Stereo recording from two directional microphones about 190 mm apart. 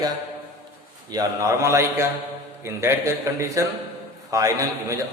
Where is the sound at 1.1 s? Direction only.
15° right (ahead or behind).